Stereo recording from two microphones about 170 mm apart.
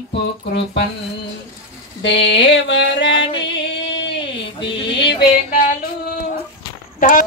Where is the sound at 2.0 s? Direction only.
90° left.